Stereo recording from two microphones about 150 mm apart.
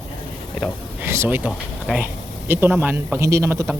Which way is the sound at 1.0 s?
15° right (ahead or behind).